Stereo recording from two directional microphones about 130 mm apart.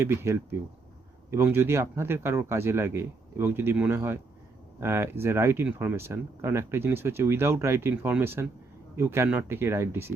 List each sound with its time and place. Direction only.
0.0 s speech: 20° right (ahead or behind)